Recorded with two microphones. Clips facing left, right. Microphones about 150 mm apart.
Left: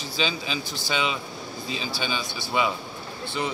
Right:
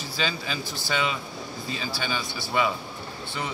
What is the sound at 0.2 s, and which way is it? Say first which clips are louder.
Speech: left 2 dB; 20° left (ahead or behind).